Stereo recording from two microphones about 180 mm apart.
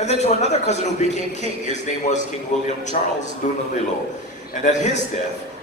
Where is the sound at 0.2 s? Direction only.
40° left (ahead or behind).